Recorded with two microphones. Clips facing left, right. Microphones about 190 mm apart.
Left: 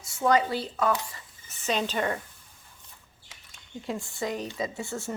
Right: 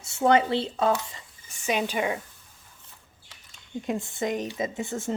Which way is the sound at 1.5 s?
10° right (ahead or behind).